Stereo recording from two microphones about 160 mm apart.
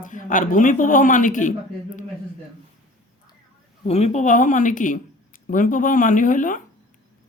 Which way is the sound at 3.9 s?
40° left (ahead or behind).